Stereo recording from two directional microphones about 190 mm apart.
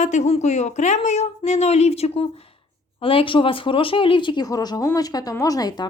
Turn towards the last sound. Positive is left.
turn(degrees=20)  # may be behind; listen again after turning